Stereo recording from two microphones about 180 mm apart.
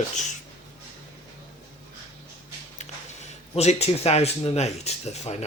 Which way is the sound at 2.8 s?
40° left (ahead or behind).